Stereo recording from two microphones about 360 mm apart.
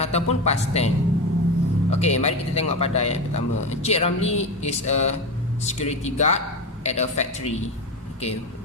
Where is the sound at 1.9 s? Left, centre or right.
Centre.